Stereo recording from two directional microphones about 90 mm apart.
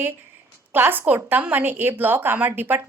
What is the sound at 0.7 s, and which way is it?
A woman's voice, 20° right (ahead or behind).